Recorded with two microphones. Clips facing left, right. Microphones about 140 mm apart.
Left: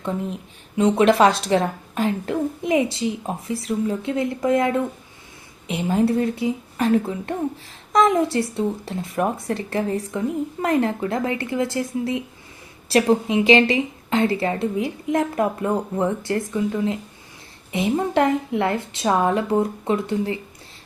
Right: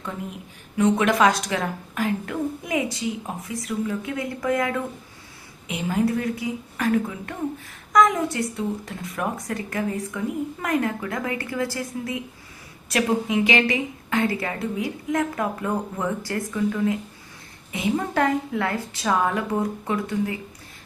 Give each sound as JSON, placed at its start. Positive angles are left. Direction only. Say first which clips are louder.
{"t": 0.8, "sound": "speech", "louder": "left 4 dB", "side_deg": 25}